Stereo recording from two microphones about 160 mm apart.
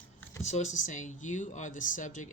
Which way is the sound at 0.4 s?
45° left (ahead or behind).